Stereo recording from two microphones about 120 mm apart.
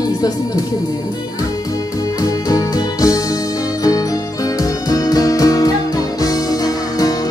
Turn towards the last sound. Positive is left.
turn(degrees=30)  # may be behind; listen again after turning